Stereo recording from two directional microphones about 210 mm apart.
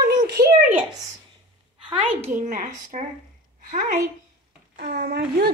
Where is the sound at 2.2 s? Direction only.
35° right (ahead or behind).